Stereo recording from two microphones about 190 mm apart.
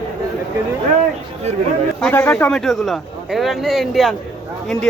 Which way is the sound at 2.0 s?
10° left (ahead or behind).